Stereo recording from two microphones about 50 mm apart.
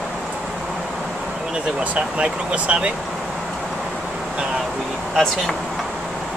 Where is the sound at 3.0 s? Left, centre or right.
Centre.